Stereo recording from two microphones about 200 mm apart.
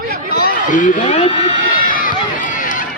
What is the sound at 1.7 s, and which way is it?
Run, 45° left (ahead or behind).